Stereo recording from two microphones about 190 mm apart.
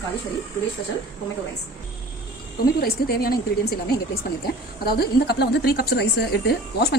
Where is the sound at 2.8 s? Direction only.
55° left (ahead or behind).